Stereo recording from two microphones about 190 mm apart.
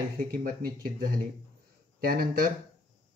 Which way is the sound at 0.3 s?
50° right (ahead or behind).